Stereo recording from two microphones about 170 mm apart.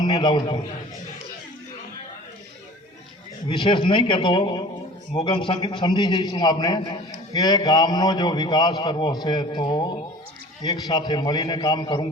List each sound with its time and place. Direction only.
0.0 s a man's voice: 25° left (ahead or behind)
3.5 s a man's voice: 30° left (ahead or behind)